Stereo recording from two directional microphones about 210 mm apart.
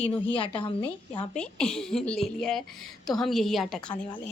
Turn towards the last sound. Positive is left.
turn(degrees=0)  # may be behind; listen again after turning